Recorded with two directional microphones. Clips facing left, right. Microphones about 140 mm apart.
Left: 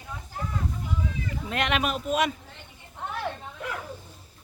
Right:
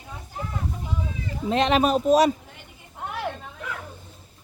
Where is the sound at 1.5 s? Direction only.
30° right (ahead or behind).